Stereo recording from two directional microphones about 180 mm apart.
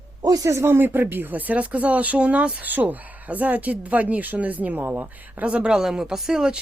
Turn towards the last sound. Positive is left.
turn(degrees=-5)  # may be behind; listen again after turning